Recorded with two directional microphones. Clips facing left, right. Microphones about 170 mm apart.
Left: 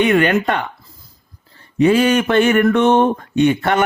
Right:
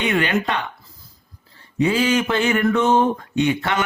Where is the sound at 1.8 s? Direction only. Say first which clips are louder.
Left 5 dB; 60° left (ahead or behind).